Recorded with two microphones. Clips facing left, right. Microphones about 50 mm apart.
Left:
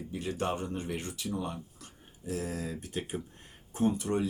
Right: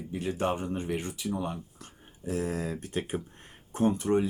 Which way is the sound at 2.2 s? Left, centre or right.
Right.